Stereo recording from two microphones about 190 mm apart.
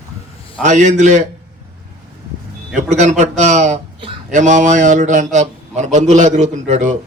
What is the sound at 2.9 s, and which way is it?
A man's voice, 40° right (ahead or behind).